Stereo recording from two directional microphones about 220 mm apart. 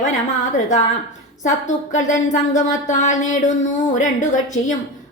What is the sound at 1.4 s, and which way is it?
Speech, 35° left (ahead or behind).